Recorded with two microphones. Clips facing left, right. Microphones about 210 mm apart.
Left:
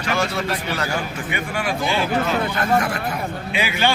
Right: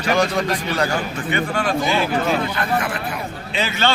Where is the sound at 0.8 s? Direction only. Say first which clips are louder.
Right 3 dB; 10° left (ahead or behind).